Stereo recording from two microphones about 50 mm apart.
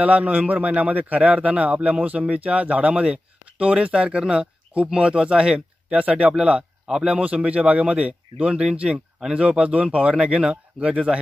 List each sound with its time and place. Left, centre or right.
0.0 s a man's voice: right